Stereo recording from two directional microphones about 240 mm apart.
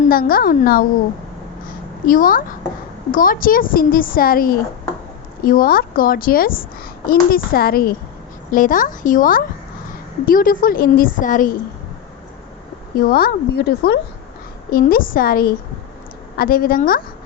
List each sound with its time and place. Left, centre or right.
0.0 s speech: left
2.0 s speech: left
13.0 s speech: left